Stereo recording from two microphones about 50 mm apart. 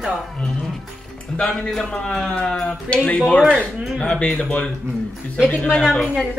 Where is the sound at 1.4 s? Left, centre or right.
Centre.